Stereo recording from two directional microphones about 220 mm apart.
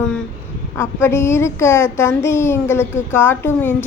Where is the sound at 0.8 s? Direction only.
10° left (ahead or behind).